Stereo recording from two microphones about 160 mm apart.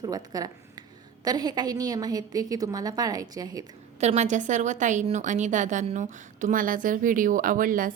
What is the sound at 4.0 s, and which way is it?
A woman's voice, 45° right (ahead or behind).